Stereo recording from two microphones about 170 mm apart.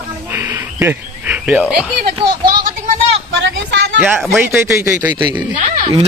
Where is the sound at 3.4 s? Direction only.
90° right.